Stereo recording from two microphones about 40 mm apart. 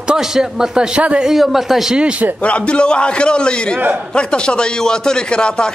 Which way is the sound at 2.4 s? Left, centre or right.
Left.